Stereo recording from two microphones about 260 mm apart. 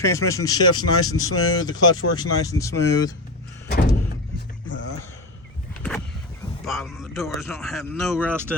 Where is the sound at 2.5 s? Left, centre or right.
Left.